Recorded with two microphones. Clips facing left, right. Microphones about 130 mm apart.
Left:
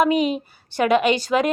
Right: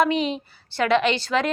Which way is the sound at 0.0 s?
10° left (ahead or behind).